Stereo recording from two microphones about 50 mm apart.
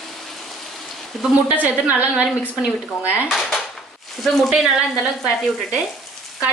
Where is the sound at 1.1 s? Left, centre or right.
Centre.